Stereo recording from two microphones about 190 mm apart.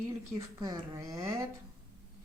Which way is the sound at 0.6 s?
20° right (ahead or behind).